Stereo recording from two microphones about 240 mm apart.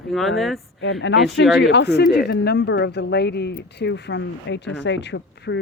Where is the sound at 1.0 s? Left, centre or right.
Left.